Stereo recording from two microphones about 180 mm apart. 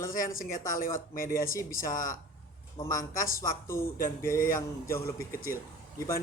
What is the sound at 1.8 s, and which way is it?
A man's voice, 20° left (ahead or behind).